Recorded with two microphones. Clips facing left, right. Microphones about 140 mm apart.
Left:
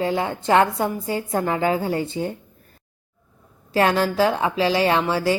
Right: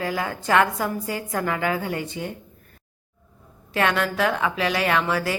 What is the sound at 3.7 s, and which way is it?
A woman's voice, 35° left (ahead or behind).